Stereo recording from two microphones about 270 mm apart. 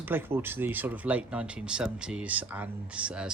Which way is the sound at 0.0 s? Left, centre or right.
Centre.